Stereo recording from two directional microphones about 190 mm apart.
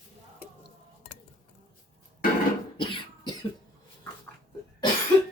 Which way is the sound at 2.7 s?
25° left (ahead or behind).